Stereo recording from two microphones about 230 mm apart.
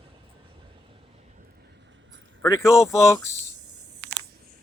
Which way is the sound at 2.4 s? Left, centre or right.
Centre.